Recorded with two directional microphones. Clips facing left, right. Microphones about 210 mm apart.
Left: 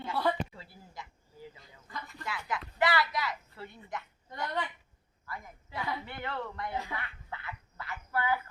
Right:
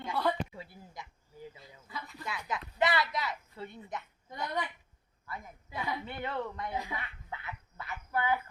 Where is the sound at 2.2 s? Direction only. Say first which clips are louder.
Left 1 dB; 20° right (ahead or behind).